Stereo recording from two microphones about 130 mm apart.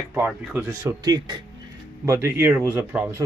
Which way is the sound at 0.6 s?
25° right (ahead or behind).